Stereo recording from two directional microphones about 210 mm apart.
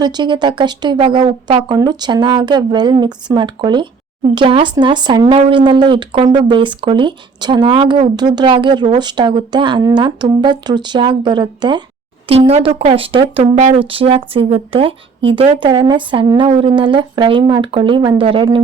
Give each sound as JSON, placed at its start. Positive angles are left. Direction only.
{"t": 0.0, "sound": "speech", "side_deg": -20}